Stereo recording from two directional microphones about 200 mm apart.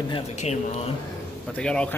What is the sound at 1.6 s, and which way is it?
Speech, 5° left (ahead or behind).